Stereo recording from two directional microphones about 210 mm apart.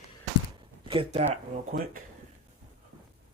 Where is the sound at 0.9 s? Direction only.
30° right (ahead or behind).